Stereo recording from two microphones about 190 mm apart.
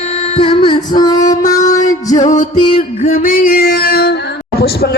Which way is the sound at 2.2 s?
40° left (ahead or behind).